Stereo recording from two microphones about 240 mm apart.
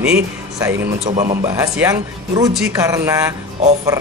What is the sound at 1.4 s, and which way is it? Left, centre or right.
A man's voice, centre.